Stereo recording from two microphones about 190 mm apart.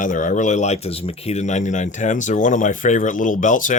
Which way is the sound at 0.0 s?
45° left (ahead or behind).